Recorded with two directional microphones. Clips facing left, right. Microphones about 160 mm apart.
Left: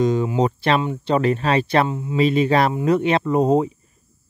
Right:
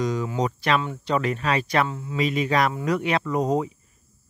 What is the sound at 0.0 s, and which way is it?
Speech, 25° left (ahead or behind).